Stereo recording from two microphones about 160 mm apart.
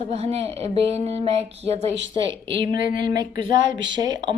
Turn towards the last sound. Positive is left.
turn(degrees=-25)  # may be behind; listen again after turning